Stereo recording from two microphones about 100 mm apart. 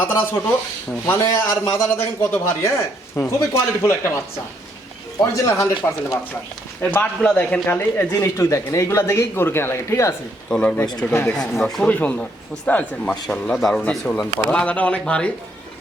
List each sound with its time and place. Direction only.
0.0 s a man's voice: 25° left (ahead or behind)
5.2 s a man's voice: 30° left (ahead or behind)
6.9 s a man's voice: 10° left (ahead or behind); by 10.2 s 30° left (ahead or behind)
10.5 s a man's voice: 15° left (ahead or behind)
11.3 s a man's voice: 5° left (ahead or behind)